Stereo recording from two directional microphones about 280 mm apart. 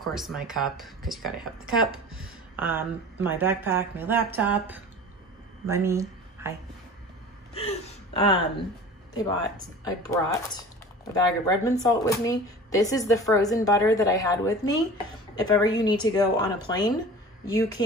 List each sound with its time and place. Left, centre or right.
0.0 s speech: centre
7.5 s gasp: centre
9.1 s speech: centre